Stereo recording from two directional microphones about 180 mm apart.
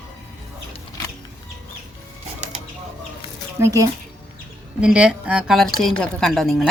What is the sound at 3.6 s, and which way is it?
Speech, 15° right (ahead or behind).